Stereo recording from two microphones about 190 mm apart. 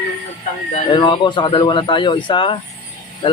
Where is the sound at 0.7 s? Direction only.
25° left (ahead or behind).